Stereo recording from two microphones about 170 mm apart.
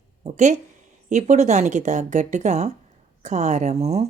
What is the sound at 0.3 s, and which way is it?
A woman's voice, 45° right (ahead or behind).